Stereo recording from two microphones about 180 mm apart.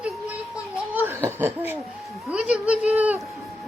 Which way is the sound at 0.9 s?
10° right (ahead or behind).